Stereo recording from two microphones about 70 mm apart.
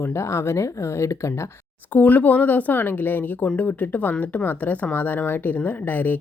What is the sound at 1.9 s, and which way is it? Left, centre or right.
Speech, left.